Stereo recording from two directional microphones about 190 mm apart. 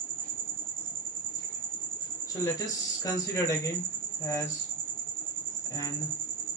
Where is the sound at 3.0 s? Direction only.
20° left (ahead or behind).